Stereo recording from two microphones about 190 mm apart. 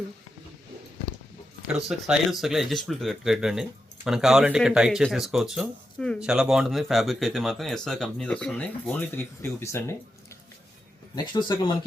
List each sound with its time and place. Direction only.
1.6 s speech: centre (ahead or behind); by 9.9 s 15° left (ahead or behind)
11.1 s speech: 25° left (ahead or behind)